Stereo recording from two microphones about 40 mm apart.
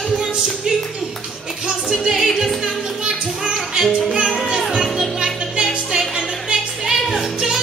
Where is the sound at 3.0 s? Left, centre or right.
Centre.